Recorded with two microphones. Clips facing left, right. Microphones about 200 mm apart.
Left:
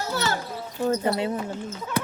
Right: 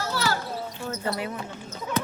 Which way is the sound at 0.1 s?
25° left (ahead or behind).